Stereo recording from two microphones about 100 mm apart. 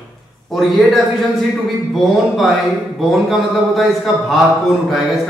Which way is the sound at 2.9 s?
Centre (ahead or behind).